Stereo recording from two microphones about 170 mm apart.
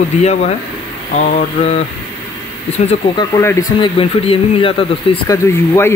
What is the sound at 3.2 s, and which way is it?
Speech, 15° left (ahead or behind).